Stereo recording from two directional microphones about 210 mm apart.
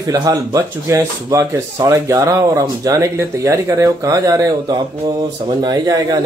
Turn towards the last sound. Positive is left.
turn(degrees=-20)  # may be behind; listen again after turning